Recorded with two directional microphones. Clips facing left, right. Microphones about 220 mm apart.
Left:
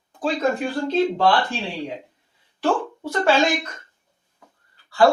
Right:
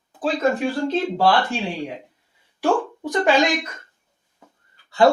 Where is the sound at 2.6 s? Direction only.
15° right (ahead or behind).